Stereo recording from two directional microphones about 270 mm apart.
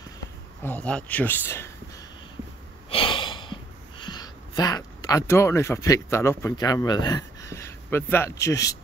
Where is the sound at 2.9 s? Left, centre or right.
Centre.